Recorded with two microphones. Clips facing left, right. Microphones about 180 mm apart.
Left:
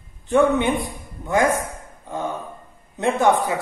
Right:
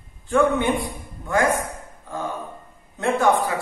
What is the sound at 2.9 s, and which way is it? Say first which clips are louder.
Speech: left 1 dB; 20° left (ahead or behind).